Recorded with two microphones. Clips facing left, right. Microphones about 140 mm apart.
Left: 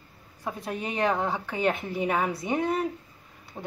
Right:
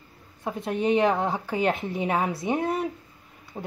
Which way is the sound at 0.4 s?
20° right (ahead or behind).